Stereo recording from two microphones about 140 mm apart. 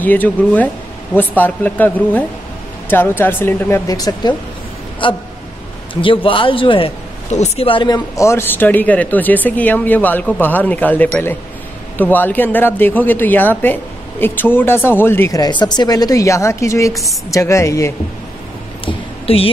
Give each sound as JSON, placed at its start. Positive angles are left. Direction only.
{"t": 0.0, "sound": "speech", "side_deg": 10}
{"t": 3.9, "sound": "a woman's voice", "side_deg": 25}
{"t": 5.0, "sound": "a man's voice", "side_deg": 35}
{"t": 7.2, "sound": "a woman's voice", "side_deg": 55}
{"t": 8.2, "sound": "speech", "side_deg": 20}
{"t": 15.3, "sound": "a woman's voice", "side_deg": 30}
{"t": 18.9, "sound": "a sound", "side_deg": 45}